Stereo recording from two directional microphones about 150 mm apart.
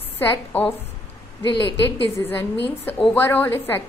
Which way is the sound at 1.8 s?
15° left (ahead or behind).